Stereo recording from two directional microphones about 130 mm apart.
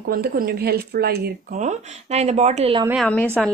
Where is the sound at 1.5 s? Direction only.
60° right (ahead or behind).